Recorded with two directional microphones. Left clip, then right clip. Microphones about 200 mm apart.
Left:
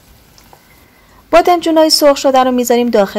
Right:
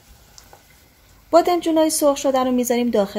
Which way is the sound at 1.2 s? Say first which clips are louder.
Left 7 dB; 20° left (ahead or behind).